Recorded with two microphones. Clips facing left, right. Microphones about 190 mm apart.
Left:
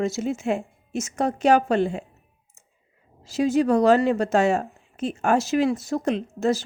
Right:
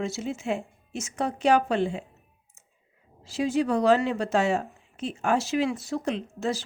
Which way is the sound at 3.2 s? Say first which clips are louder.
Left 4 dB; 45° left (ahead or behind).